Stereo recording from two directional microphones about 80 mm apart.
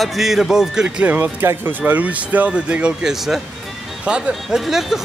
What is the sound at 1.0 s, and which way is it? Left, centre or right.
Speech, right.